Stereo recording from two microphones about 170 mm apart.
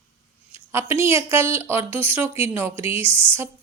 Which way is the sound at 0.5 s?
15° right (ahead or behind).